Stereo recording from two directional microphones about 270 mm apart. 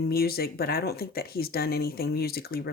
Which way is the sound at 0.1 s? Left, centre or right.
Left.